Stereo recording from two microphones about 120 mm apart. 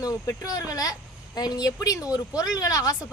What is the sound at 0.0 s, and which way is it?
Speech, 30° left (ahead or behind).